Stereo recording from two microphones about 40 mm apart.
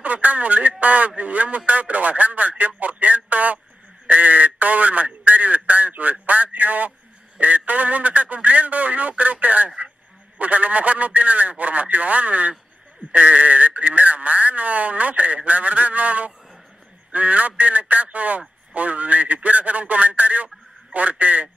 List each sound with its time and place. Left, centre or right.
0.0 s speech: right